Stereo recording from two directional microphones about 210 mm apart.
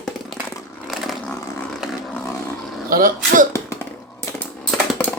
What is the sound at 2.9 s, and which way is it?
Speech, 40° right (ahead or behind).